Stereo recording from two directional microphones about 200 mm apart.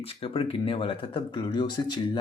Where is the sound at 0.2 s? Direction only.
25° left (ahead or behind).